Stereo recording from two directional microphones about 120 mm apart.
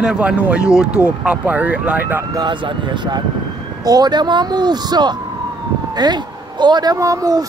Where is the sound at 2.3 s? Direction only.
40° right (ahead or behind).